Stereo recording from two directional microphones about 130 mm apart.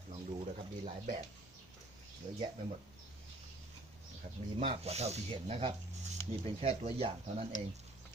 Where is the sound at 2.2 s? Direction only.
40° right (ahead or behind).